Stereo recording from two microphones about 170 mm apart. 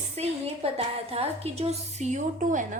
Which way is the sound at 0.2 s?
35° right (ahead or behind).